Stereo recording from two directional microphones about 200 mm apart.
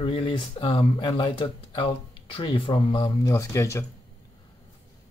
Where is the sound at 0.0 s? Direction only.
25° left (ahead or behind).